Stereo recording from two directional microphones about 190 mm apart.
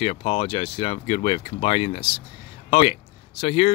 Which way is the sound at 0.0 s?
30° left (ahead or behind).